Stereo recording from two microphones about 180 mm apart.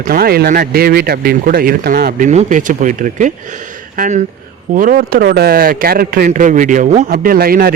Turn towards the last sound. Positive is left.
turn(degrees=-55)  # may be behind; listen again after turning